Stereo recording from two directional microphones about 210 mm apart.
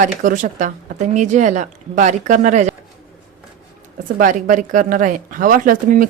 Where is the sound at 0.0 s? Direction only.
40° right (ahead or behind).